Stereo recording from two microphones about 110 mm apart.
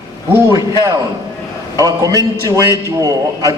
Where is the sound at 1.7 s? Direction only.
30° right (ahead or behind).